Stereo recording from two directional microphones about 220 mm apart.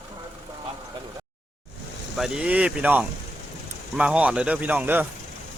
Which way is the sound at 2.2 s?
5° right (ahead or behind).